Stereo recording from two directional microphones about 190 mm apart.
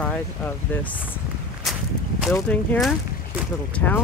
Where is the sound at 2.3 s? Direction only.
10° left (ahead or behind).